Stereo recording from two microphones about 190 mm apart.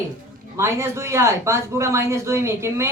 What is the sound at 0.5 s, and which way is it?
Speech, 15° right (ahead or behind).